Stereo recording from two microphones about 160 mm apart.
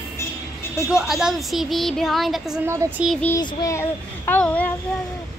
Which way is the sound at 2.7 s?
15° right (ahead or behind).